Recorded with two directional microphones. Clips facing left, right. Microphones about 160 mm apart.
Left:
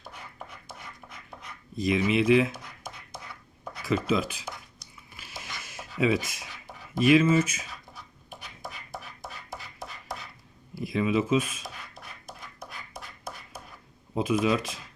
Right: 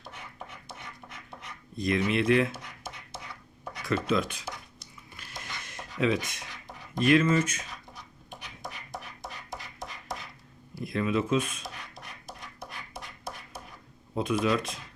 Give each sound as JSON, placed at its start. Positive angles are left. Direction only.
{"t": 1.1, "sound": "pant", "side_deg": 5}
{"t": 3.6, "sound": "speech", "side_deg": 5}
{"t": 5.1, "sound": "a sound", "side_deg": 5}
{"t": 6.9, "sound": "writing", "side_deg": 5}
{"t": 10.8, "sound": "speech", "side_deg": 5}
{"t": 12.5, "sound": "a sound", "side_deg": 0}
{"t": 14.2, "sound": "speech", "side_deg": 5}